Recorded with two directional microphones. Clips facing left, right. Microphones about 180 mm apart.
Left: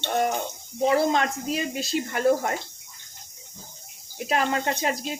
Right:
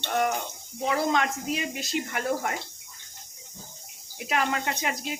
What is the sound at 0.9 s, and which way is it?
Speech, 35° left (ahead or behind).